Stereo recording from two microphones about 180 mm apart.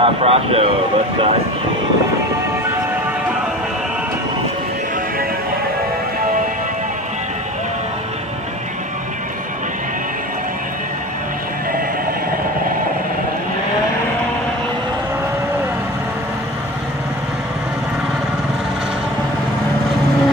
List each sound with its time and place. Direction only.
0.0 s speech: 35° right (ahead or behind)